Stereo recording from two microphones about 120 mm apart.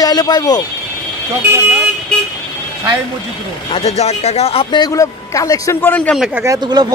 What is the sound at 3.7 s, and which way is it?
Speech, 60° left (ahead or behind).